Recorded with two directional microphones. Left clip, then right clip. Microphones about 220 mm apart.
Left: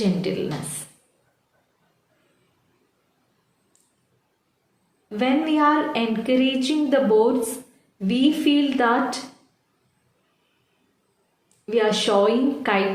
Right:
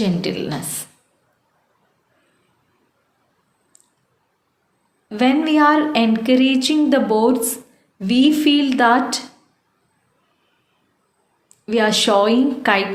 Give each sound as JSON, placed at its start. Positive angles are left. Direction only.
{"t": 0.0, "sound": "a woman's voice", "side_deg": -40}
{"t": 5.0, "sound": "a woman's voice", "side_deg": -40}
{"t": 11.6, "sound": "a woman's voice", "side_deg": -40}